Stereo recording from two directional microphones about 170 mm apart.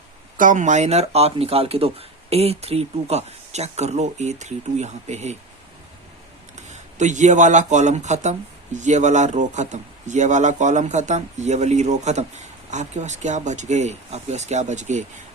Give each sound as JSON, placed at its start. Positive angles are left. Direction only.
{"t": 0.3, "sound": "speech", "side_deg": -50}
{"t": 6.6, "sound": "speech", "side_deg": -45}